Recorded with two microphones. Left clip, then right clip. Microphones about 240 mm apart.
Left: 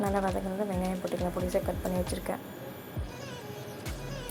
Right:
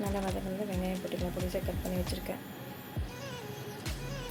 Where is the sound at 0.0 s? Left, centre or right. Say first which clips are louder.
Left 6 dB; centre.